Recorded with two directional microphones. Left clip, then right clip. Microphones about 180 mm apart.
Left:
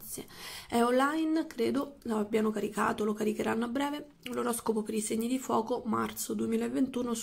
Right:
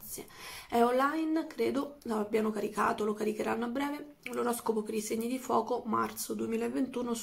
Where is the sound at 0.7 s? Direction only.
25° left (ahead or behind).